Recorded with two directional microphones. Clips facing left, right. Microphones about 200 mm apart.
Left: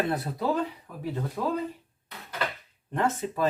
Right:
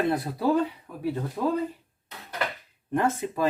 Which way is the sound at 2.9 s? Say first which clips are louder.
Right 2 dB; 10° right (ahead or behind).